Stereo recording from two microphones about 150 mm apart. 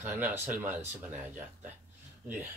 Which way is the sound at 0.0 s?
10° right (ahead or behind).